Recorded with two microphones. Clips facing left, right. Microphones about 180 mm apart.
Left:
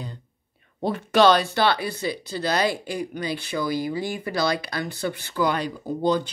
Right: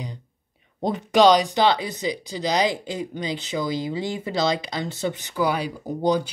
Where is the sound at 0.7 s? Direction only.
20° right (ahead or behind).